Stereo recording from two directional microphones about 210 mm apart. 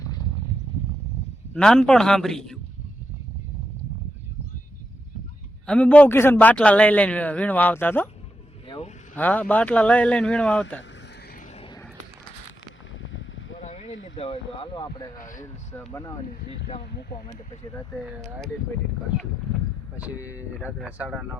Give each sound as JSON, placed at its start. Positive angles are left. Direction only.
{"t": 1.5, "sound": "a man's voice", "side_deg": 5}
{"t": 5.6, "sound": "a man's voice", "side_deg": 5}
{"t": 8.6, "sound": "vehicle", "side_deg": 25}
{"t": 9.1, "sound": "a man's voice", "side_deg": 10}
{"t": 11.5, "sound": "a sound", "side_deg": 25}
{"t": 13.0, "sound": "a sound", "side_deg": 65}
{"t": 13.7, "sound": "a sound", "side_deg": 30}
{"t": 14.0, "sound": "speech", "side_deg": 25}
{"t": 15.2, "sound": "speech", "side_deg": 40}
{"t": 15.7, "sound": "a man's voice", "side_deg": 10}
{"t": 16.2, "sound": "speech", "side_deg": 45}
{"t": 20.1, "sound": "a man's voice", "side_deg": 15}
{"t": 20.6, "sound": "a man's voice", "side_deg": -5}